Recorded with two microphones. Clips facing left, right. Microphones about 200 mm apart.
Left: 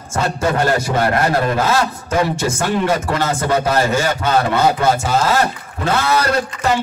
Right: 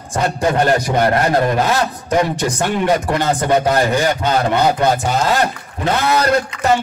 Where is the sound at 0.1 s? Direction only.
15° right (ahead or behind).